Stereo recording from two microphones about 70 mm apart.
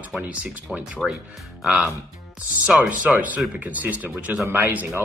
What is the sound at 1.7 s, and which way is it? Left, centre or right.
Speech, right.